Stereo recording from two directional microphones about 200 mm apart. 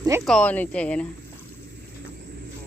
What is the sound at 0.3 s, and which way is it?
Speech, 5° left (ahead or behind).